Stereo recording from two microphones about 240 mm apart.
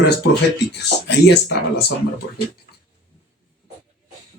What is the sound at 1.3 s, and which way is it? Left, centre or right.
Speech, left.